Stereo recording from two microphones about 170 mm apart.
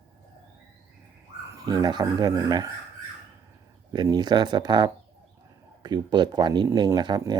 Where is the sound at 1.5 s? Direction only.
20° right (ahead or behind).